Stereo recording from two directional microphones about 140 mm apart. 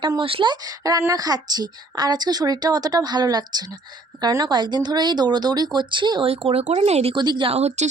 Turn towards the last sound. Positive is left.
turn(degrees=-50)  # may be behind; listen again after turning